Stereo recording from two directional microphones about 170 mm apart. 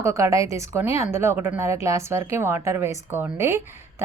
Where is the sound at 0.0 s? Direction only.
15° right (ahead or behind).